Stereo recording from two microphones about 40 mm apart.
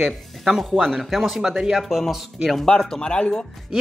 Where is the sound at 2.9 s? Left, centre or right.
Left.